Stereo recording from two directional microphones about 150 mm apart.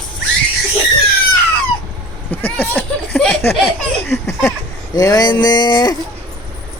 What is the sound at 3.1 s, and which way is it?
Laughter, 5° left (ahead or behind).